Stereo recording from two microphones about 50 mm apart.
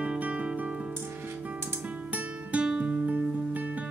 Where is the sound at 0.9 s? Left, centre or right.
Right.